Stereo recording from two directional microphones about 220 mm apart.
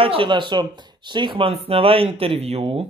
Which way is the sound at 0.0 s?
25° right (ahead or behind).